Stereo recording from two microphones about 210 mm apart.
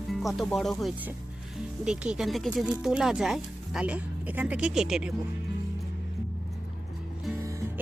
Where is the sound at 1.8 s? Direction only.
5° right (ahead or behind).